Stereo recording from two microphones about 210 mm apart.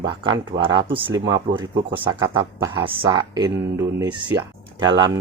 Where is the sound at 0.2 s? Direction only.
25° right (ahead or behind).